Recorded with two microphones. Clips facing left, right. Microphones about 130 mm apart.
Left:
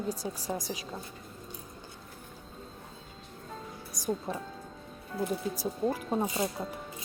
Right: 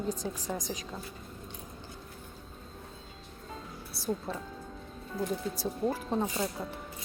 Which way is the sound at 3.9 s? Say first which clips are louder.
Left 1 dB; 15° left (ahead or behind).